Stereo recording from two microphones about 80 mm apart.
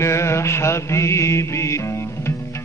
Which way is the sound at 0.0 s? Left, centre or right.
Left.